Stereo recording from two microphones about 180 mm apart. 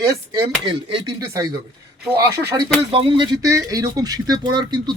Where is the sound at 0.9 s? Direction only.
25° right (ahead or behind).